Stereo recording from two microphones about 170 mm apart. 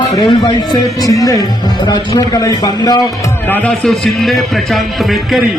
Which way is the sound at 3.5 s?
5° left (ahead or behind).